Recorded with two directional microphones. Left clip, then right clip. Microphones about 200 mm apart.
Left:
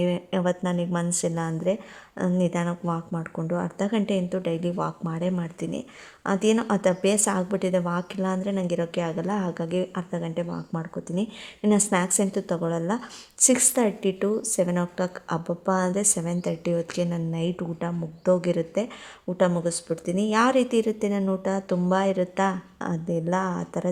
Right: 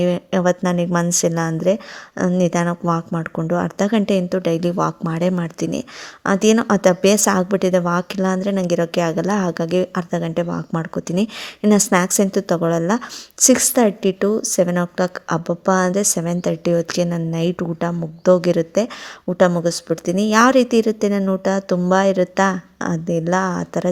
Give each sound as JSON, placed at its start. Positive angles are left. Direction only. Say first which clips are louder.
{"t": 0.0, "sound": "a woman's voice", "louder": "right 8 dB", "side_deg": -25}